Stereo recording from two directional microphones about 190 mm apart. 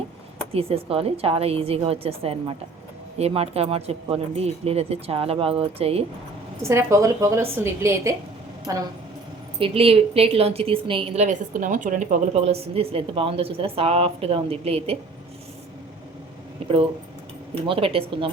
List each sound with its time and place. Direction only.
0.5 s a woman's voice: 30° right (ahead or behind)
6.6 s speech: 15° right (ahead or behind)
9.6 s a woman's voice: 30° right (ahead or behind)
16.6 s a sound: 30° right (ahead or behind)
17.7 s speech: 30° right (ahead or behind)